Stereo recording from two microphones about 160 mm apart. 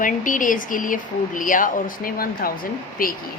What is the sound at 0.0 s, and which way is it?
Speech, 55° left (ahead or behind).